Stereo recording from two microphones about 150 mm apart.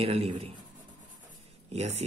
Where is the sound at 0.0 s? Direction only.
40° right (ahead or behind).